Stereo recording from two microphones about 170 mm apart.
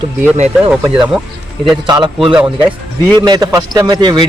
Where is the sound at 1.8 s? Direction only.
25° right (ahead or behind).